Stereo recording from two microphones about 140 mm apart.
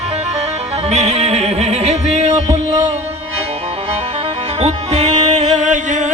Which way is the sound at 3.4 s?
50° right (ahead or behind).